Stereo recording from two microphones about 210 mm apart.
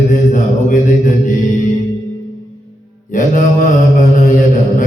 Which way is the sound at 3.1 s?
35° left (ahead or behind).